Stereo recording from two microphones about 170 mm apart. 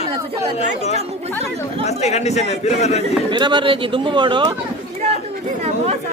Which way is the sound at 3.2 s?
25° right (ahead or behind).